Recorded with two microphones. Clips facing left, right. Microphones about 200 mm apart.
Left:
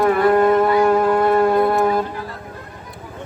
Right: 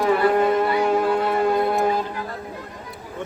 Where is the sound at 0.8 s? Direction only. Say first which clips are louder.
Left 4 dB; 55° left (ahead or behind).